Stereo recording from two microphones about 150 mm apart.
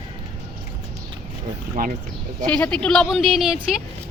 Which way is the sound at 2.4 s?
5° left (ahead or behind).